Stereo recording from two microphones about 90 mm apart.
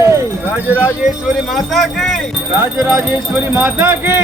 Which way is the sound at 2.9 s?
20° right (ahead or behind).